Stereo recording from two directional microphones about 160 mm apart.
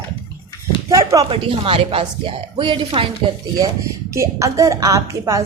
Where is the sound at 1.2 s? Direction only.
35° right (ahead or behind).